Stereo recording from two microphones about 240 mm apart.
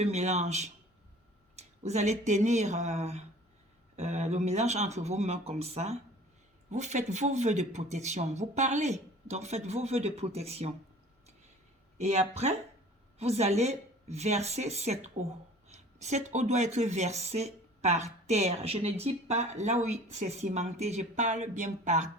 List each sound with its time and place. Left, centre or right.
0.0 s speech: right
11.9 s speech: right